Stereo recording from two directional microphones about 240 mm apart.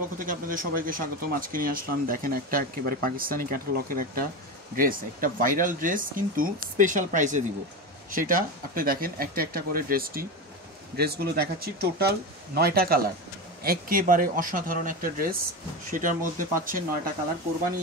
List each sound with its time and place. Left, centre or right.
0.2 s speech: right